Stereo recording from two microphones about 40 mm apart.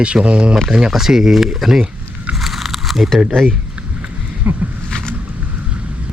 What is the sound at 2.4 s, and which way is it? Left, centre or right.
Biting, centre.